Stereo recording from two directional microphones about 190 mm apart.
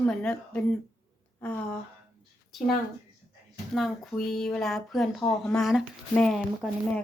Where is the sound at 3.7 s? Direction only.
Centre (ahead or behind).